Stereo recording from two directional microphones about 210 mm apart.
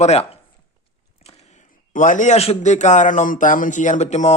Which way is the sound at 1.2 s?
30° left (ahead or behind).